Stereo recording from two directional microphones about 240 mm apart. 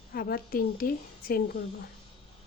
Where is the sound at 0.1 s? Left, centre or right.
Left.